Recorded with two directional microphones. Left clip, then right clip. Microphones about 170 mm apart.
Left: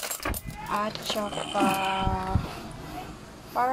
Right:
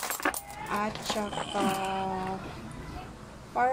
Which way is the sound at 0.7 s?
15° left (ahead or behind).